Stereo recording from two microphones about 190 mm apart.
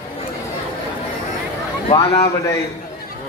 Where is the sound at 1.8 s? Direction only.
30° left (ahead or behind).